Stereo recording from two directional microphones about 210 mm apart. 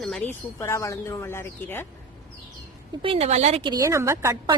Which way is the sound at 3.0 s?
25° right (ahead or behind).